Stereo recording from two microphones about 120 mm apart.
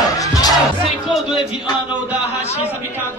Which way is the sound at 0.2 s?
30° left (ahead or behind).